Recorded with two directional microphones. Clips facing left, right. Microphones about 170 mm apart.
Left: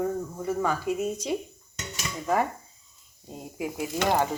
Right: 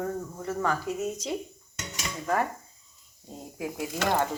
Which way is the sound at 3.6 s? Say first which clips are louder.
Left 2 dB; 15° left (ahead or behind).